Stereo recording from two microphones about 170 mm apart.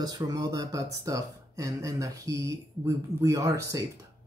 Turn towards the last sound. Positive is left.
turn(degrees=-20)  # may be behind; listen again after turning